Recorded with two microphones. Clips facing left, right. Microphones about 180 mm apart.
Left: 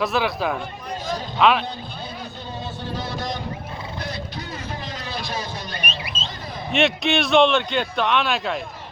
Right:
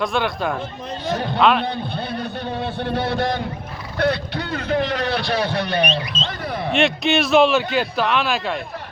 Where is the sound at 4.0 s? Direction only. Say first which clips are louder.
Right 14 dB; 65° right (ahead or behind).